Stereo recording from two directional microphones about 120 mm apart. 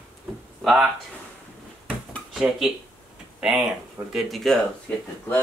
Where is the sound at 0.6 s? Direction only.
Centre (ahead or behind).